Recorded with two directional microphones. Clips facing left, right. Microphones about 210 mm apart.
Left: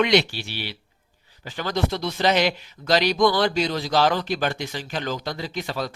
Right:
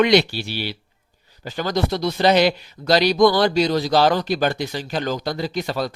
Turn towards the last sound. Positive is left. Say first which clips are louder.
# right 5 dB
turn(degrees=-40)  # may be behind; listen again after turning